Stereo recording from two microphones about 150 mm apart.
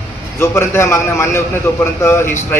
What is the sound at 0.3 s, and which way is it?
A man's voice, 15° left (ahead or behind).